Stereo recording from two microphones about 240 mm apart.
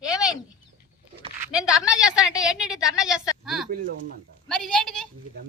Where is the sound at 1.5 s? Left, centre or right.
Centre.